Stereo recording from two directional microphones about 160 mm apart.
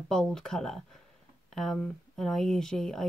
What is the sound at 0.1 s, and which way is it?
Speech, 5° left (ahead or behind).